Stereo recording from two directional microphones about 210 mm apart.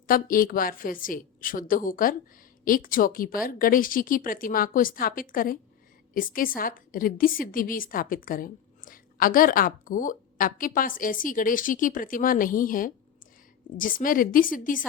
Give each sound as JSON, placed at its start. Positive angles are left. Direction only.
{"t": 0.1, "sound": "a woman's voice", "side_deg": 40}